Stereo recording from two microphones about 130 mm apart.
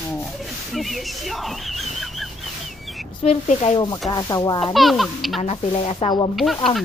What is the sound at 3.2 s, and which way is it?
Speech, 55° left (ahead or behind).